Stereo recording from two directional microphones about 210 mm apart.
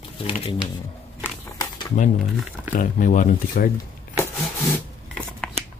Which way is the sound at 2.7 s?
40° left (ahead or behind).